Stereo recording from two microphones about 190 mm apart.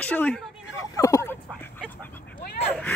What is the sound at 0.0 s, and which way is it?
Speech, 10° left (ahead or behind).